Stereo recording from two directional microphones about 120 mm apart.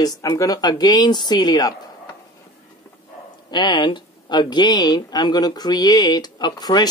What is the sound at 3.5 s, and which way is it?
Speech, 40° left (ahead or behind).